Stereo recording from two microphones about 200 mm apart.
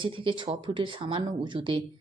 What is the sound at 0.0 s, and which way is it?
A woman's voice, 25° right (ahead or behind).